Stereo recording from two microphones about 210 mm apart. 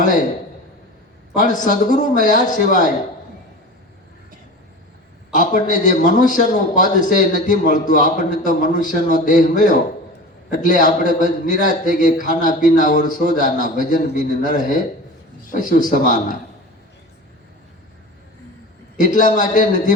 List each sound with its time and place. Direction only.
1.4 s a man's voice: 40° left (ahead or behind)
5.3 s a man's voice: 40° left (ahead or behind)
18.9 s a man's voice: 40° left (ahead or behind)